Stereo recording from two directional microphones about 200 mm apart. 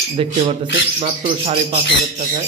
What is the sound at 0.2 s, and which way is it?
Speech, 30° right (ahead or behind).